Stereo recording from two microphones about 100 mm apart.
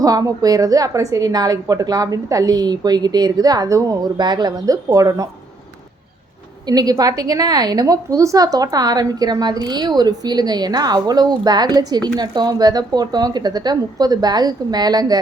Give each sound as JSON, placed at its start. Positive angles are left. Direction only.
{"t": 0.0, "sound": "a woman's voice", "side_deg": -35}
{"t": 6.7, "sound": "a woman's voice", "side_deg": -40}